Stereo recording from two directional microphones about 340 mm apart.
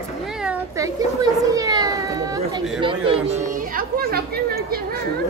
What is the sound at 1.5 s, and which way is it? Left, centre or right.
Children playing, centre.